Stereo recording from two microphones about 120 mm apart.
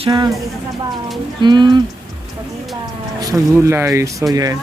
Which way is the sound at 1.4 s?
40° right (ahead or behind).